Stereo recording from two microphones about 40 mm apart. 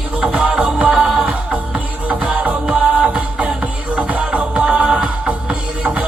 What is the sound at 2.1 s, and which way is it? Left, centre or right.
Music, right.